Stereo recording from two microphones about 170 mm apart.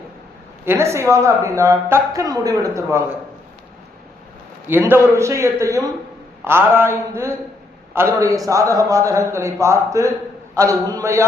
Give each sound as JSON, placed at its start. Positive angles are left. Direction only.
{"t": 0.6, "sound": "a woman's voice", "side_deg": -15}
{"t": 4.7, "sound": "a man's voice", "side_deg": -10}